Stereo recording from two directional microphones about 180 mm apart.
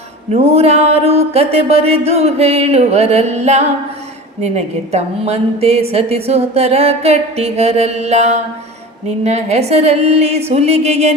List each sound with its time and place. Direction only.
0.3 s a woman's voice: 35° right (ahead or behind)